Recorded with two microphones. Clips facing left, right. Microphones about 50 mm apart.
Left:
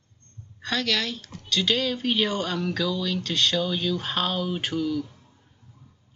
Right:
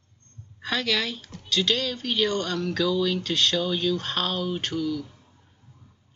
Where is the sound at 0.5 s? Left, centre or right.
Centre.